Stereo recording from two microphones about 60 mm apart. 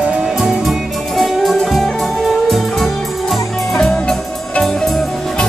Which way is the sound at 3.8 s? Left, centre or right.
Centre.